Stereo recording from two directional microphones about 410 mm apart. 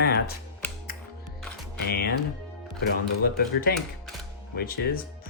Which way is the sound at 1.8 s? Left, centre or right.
Left.